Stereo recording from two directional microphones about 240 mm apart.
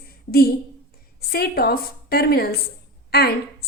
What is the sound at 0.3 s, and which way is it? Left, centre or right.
A woman's voice, left.